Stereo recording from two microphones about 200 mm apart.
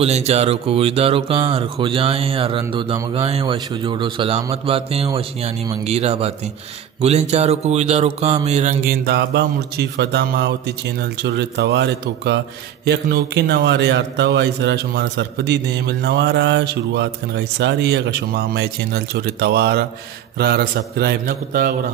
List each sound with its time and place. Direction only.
0.0 s a man's voice: 30° right (ahead or behind); by 21.7 s 50° right (ahead or behind)